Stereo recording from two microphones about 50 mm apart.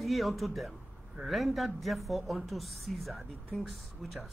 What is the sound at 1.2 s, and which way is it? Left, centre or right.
Speech, right.